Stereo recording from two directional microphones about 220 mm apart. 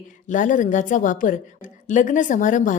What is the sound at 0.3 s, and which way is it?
A woman's voice, 35° left (ahead or behind).